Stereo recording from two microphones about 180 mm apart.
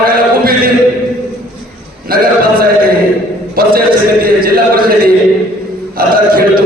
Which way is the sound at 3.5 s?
55° right (ahead or behind).